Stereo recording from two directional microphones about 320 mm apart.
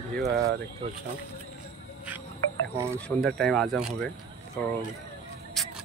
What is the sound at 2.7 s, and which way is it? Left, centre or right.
Speech, centre.